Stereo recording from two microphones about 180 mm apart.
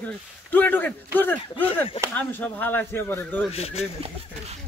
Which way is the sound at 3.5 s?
35° left (ahead or behind).